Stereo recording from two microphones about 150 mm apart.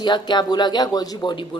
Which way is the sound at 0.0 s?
30° left (ahead or behind).